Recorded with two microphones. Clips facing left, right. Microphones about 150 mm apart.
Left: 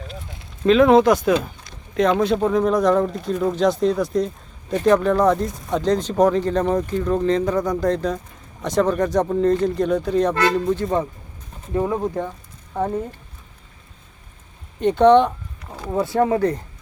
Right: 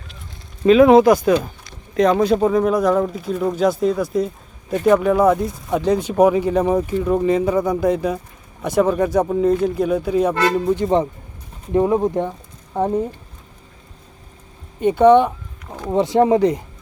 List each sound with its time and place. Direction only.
0.6 s speech: 5° right (ahead or behind)
10.8 s speech: 25° right (ahead or behind)
14.8 s speech: 10° right (ahead or behind)
15.9 s speech: 20° right (ahead or behind)